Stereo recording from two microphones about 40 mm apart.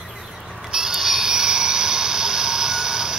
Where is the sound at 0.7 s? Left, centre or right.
Centre.